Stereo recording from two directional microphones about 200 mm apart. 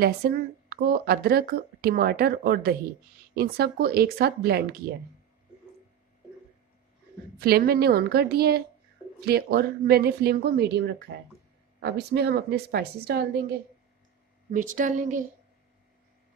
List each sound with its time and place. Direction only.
0.0 s speech: 50° right (ahead or behind)
7.3 s speech: 50° right (ahead or behind)
14.5 s speech: 40° right (ahead or behind)